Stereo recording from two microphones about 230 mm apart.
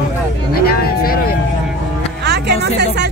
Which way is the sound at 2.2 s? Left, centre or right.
Right.